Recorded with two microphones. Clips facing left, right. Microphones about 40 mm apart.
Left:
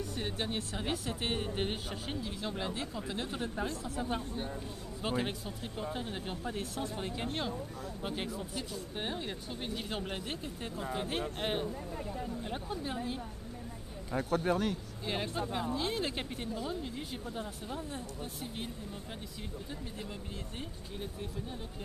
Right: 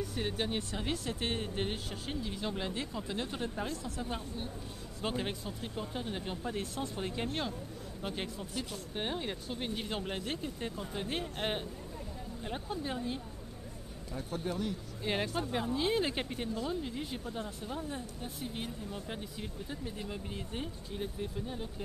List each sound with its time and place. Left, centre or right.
0.0 s speech: centre
2.2 s speech: centre
14.1 s speech: left
15.1 s speech: centre
19.7 s speech: centre